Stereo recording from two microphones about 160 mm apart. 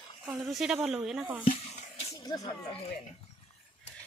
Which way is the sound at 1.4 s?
35° left (ahead or behind).